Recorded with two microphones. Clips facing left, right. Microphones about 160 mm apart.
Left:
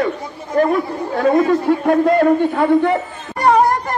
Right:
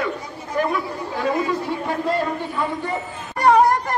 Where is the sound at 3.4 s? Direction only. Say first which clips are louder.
Left 1 dB; 30° left (ahead or behind).